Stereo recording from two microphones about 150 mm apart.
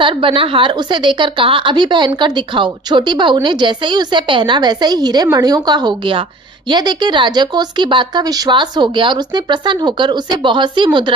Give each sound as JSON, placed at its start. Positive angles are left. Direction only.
{"t": 0.0, "sound": "a woman's voice", "side_deg": -35}